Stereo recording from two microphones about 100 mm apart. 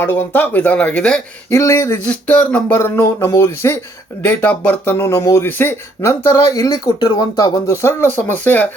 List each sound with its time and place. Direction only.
0.0 s speech: 20° left (ahead or behind)
1.5 s speech: 30° left (ahead or behind)
2.0 s speech: 15° left (ahead or behind)
2.7 s speech: 25° left (ahead or behind); by 7.6 s 40° left (ahead or behind)
7.7 s speech: 25° left (ahead or behind)